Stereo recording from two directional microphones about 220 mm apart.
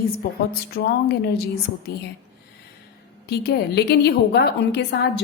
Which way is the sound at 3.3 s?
45° left (ahead or behind).